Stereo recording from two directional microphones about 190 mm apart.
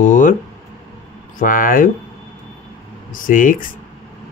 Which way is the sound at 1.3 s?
45° left (ahead or behind).